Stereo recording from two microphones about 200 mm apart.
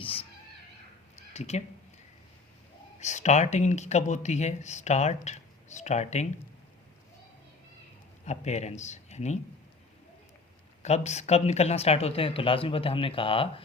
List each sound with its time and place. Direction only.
0.0 s a sound: 30° left (ahead or behind)
1.3 s speech: 35° left (ahead or behind)
3.0 s speech: 35° left (ahead or behind)
8.2 s speech: 35° left (ahead or behind)
10.8 s speech: 35° left (ahead or behind)